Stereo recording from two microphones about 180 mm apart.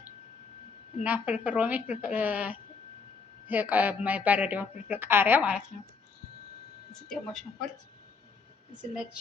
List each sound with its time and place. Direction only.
1.0 s a woman's voice: 10° right (ahead or behind)
7.1 s speech: centre (ahead or behind)
8.8 s speech: 5° right (ahead or behind)